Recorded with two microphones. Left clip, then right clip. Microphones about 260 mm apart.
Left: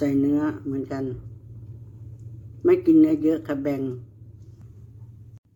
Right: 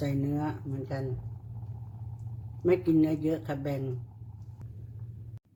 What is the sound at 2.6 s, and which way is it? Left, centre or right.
Speech, centre.